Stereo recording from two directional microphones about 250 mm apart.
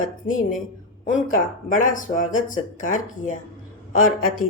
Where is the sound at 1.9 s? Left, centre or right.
Left.